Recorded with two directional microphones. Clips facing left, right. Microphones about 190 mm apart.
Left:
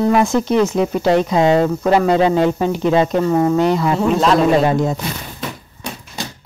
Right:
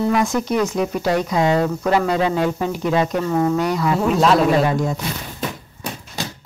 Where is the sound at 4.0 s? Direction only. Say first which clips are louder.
Right 1 dB; centre (ahead or behind).